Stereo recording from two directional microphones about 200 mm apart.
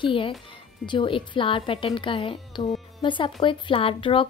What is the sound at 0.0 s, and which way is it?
A woman's voice, 25° left (ahead or behind).